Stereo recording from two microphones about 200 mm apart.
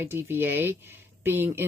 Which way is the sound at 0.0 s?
10° right (ahead or behind).